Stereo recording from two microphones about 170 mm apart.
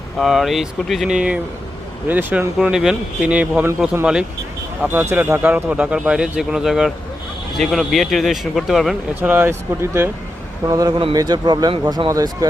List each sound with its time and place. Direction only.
0.2 s a man's voice: centre (ahead or behind)
9.3 s a man's voice: 15° right (ahead or behind)